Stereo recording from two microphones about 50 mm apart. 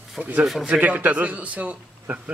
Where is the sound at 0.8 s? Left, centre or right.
Right.